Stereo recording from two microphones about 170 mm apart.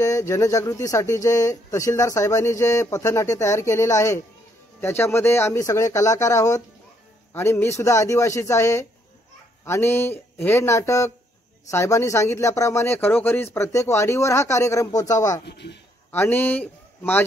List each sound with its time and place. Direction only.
0.0 s speech: 20° left (ahead or behind)
15.4 s speech: 80° left
16.1 s speech: 10° left (ahead or behind)